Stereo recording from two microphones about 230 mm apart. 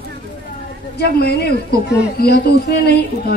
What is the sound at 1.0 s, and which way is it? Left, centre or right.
A woman's voice, left.